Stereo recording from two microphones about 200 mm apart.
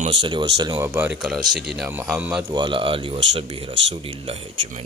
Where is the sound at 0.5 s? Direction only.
20° right (ahead or behind).